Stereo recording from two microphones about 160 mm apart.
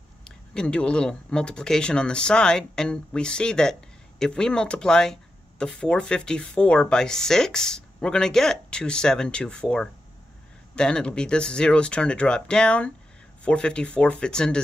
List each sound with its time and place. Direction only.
0.2 s speech: 5° left (ahead or behind)